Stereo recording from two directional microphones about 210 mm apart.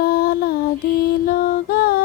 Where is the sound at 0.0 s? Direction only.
45° left (ahead or behind).